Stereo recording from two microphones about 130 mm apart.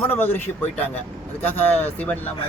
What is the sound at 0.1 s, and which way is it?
Speech, 15° left (ahead or behind).